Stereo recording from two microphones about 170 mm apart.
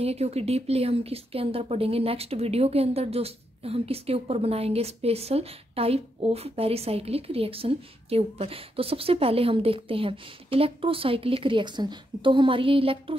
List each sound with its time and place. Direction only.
0.0 s speech: 40° right (ahead or behind)